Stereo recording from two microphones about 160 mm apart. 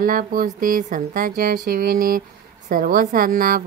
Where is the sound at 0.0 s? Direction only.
60° right (ahead or behind).